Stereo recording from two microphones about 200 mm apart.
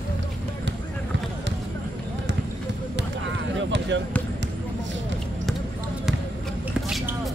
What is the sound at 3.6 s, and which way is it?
Basketball bounce, 65° right (ahead or behind).